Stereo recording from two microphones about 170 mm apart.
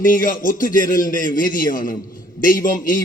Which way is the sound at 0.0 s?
50° left (ahead or behind).